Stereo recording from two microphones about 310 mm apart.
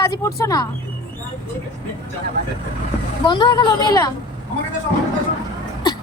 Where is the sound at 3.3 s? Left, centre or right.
Centre.